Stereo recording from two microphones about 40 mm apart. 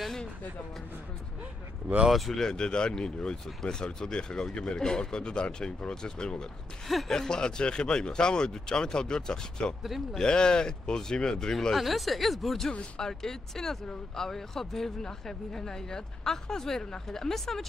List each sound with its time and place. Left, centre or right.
2.0 s speech: centre
2.4 s speech: centre
6.9 s speech: centre
7.2 s speech: centre
11.7 s speech: centre